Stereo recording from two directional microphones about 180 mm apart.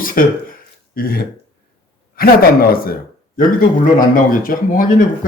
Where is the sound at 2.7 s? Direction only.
55° left (ahead or behind).